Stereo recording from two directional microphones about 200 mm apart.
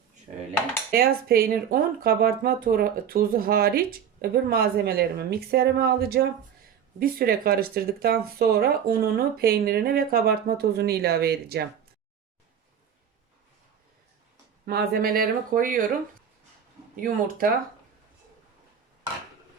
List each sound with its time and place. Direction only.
0.9 s speech: 50° right (ahead or behind)
14.7 s speech: 50° right (ahead or behind)
17.0 s speech: 45° right (ahead or behind)